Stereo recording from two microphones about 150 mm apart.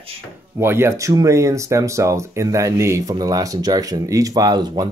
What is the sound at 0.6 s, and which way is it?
Speech, 15° right (ahead or behind).